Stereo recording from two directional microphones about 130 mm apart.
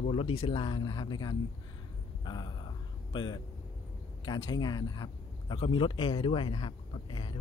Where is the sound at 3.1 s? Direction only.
35° left (ahead or behind).